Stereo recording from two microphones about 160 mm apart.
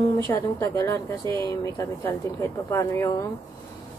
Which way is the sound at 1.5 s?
20° left (ahead or behind).